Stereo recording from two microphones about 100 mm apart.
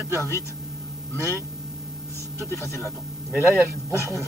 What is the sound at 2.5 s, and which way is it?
Speech, 25° left (ahead or behind).